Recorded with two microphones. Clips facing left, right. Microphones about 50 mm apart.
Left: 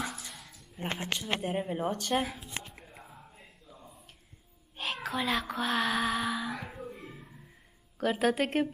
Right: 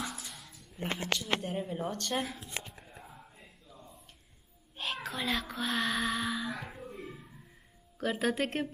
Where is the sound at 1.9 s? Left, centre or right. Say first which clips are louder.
Left 4 dB; centre.